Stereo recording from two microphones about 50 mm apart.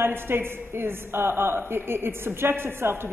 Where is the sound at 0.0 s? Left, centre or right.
Right.